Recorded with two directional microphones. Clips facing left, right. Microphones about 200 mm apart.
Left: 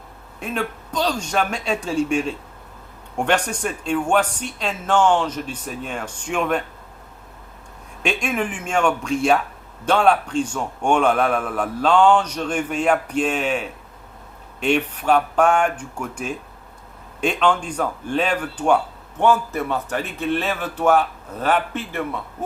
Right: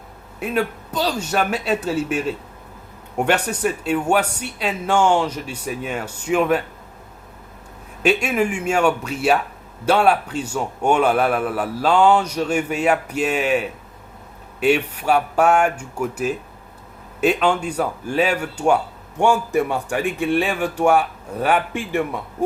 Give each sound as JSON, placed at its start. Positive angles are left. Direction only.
{"t": 0.3, "sound": "a man's voice", "side_deg": -5}
{"t": 8.0, "sound": "a man's voice", "side_deg": -5}